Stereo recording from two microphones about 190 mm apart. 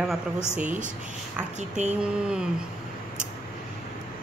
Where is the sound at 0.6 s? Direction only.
40° right (ahead or behind).